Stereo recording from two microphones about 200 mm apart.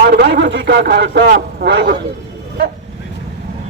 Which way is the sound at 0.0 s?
50° right (ahead or behind).